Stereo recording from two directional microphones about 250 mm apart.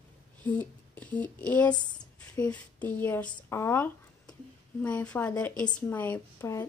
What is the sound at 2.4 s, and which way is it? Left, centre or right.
A woman's voice, centre.